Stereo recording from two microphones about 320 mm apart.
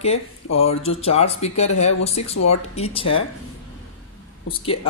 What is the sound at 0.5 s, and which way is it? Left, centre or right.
Speech, centre.